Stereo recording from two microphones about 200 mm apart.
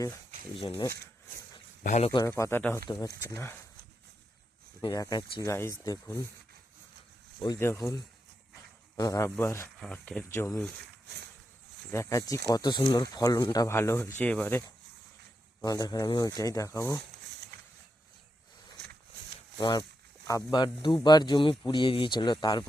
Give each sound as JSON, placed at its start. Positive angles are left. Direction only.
{"t": 0.7, "sound": "speech", "side_deg": 10}
{"t": 1.8, "sound": "speech", "side_deg": 35}
{"t": 2.2, "sound": "speech", "side_deg": 15}
{"t": 4.8, "sound": "speech", "side_deg": 20}
{"t": 7.3, "sound": "speech", "side_deg": 20}
{"t": 11.9, "sound": "speech", "side_deg": 15}
{"t": 15.6, "sound": "speech", "side_deg": 20}
{"t": 19.5, "sound": "speech", "side_deg": 20}